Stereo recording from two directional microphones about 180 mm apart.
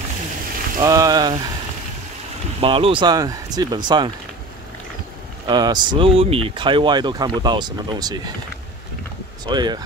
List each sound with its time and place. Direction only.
0.7 s speech: 20° right (ahead or behind)
2.6 s speech: 30° right (ahead or behind)
5.5 s speech: 25° right (ahead or behind)
9.5 s speech: 25° right (ahead or behind)